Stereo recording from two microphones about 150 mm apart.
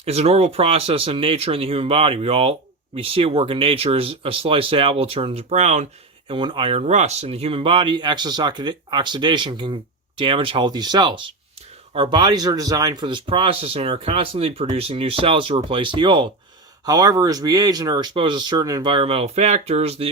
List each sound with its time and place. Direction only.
0.0 s speech: 45° right (ahead or behind)
6.2 s speech: 35° right (ahead or behind)